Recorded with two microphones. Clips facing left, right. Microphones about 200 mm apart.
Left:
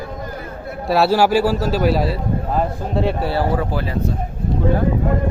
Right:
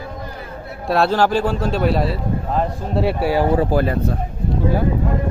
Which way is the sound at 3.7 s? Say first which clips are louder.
Right 6 dB; 50° right (ahead or behind).